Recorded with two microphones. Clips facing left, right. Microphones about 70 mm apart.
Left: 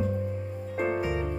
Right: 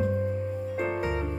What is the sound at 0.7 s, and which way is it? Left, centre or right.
Harp, centre.